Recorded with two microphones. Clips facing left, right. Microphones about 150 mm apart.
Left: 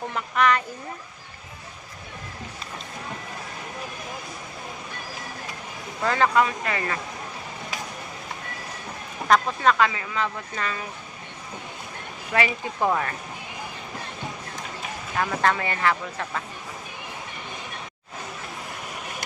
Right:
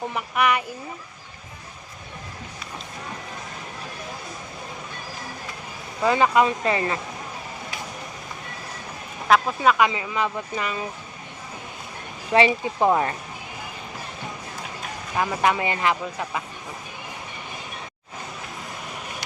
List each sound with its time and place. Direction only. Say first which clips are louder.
0.1 s speech: left 1 dB; 10° right (ahead or behind)
6.0 s speech: right 2 dB; 15° right (ahead or behind)
9.2 s speech: right 1 dB; 5° right (ahead or behind)
12.3 s speech: right 6 dB; 20° right (ahead or behind)
15.1 s speech: right 2 dB; 10° right (ahead or behind)